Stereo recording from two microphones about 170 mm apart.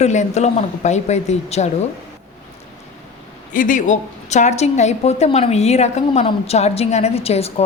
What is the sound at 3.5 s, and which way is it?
A woman's voice, 50° left (ahead or behind).